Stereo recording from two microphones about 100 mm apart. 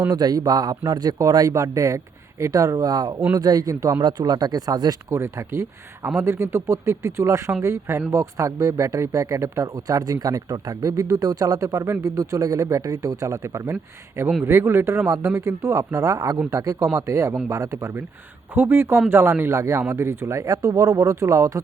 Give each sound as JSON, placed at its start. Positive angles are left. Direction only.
{"t": 0.1, "sound": "speech", "side_deg": -40}
{"t": 5.1, "sound": "speech", "side_deg": -25}